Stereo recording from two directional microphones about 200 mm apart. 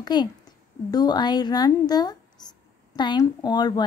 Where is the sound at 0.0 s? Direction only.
20° left (ahead or behind).